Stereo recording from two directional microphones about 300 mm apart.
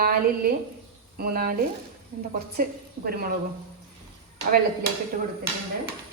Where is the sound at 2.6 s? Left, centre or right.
Right.